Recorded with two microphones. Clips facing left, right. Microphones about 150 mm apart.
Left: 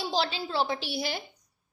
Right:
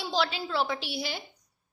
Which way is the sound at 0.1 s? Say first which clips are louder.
Right 3 dB; 35° left (ahead or behind).